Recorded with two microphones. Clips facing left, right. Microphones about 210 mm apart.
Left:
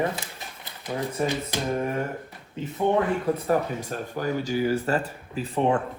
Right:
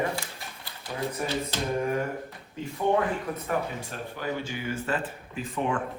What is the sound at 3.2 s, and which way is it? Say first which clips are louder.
Speech: left 7 dB; 30° left (ahead or behind).